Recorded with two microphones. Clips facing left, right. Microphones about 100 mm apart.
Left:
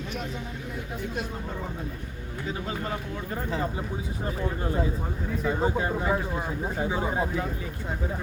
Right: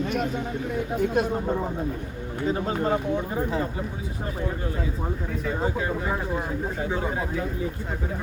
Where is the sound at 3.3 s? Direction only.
10° right (ahead or behind).